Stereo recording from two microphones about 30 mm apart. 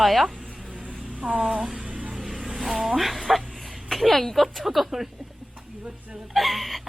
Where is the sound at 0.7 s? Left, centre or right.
Right.